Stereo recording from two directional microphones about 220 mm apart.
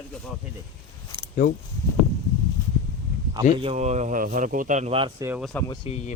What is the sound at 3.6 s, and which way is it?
Speech, 30° right (ahead or behind).